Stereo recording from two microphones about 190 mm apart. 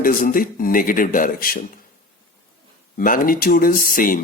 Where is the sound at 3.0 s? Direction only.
45° left (ahead or behind).